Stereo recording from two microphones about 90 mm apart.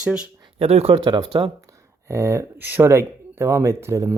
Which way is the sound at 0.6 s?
90° right.